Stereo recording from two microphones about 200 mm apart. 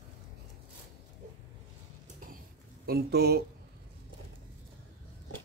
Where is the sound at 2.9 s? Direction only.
50° right (ahead or behind).